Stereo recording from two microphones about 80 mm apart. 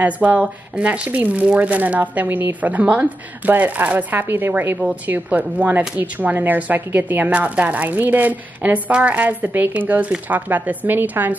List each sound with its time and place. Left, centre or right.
0.0 s speech: centre